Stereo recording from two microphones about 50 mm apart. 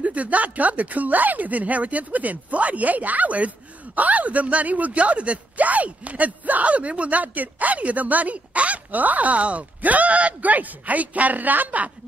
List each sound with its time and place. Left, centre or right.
0.0 s speech: right